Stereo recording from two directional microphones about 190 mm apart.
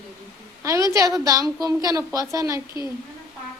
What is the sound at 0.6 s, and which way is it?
A woman's voice, 15° right (ahead or behind).